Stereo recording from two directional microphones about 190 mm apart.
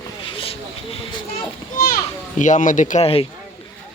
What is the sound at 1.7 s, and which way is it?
Children playing, 50° left (ahead or behind).